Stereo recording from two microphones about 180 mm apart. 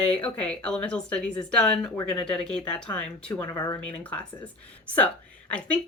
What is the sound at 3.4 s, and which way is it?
Speech, 20° left (ahead or behind).